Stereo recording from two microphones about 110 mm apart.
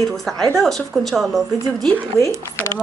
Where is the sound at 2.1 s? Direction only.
25° left (ahead or behind).